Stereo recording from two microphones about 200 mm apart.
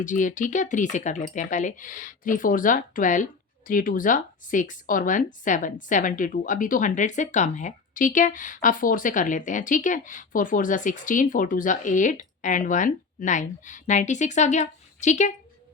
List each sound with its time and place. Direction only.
0.0 s speech: 40° left (ahead or behind)